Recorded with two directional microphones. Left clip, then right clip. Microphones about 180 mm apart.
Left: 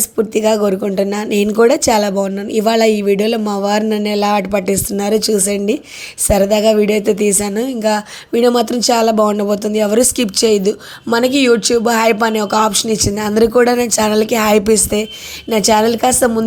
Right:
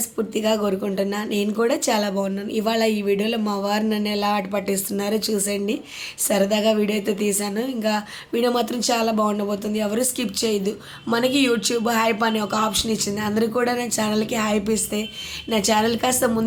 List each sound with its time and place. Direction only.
0.2 s a woman's voice: 35° left (ahead or behind)